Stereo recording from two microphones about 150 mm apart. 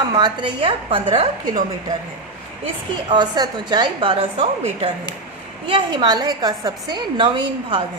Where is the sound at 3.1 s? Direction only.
30° right (ahead or behind).